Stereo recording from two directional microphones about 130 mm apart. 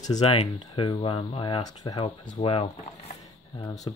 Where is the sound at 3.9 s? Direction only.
40° left (ahead or behind).